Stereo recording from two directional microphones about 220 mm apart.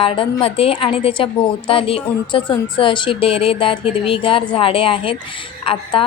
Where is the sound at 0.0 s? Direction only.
25° left (ahead or behind).